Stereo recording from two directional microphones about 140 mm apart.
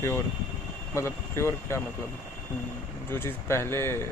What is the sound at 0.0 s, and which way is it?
Speech, 20° left (ahead or behind).